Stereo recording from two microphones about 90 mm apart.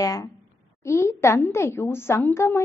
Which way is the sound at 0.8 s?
30° left (ahead or behind).